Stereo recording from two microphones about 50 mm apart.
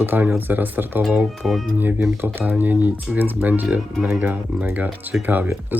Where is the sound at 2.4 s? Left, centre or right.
Right.